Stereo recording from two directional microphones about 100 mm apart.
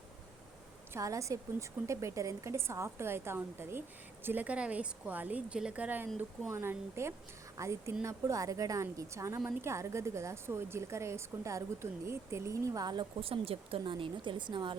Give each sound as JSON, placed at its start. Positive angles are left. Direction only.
{"t": 0.9, "sound": "a woman's voice", "side_deg": -30}
{"t": 13.1, "sound": "speech", "side_deg": -65}